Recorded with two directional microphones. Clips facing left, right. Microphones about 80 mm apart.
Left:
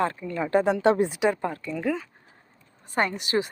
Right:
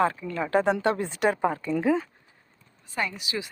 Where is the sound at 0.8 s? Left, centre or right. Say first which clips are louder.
Left 5 dB; left.